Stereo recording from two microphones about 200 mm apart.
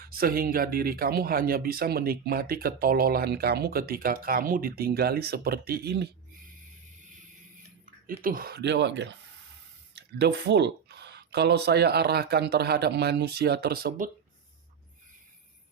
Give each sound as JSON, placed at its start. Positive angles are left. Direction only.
{"t": 0.0, "sound": "speech", "side_deg": -45}
{"t": 8.2, "sound": "speech", "side_deg": -45}